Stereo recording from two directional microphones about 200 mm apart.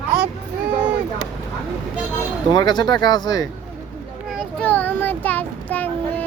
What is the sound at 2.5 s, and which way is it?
Speech, 20° left (ahead or behind).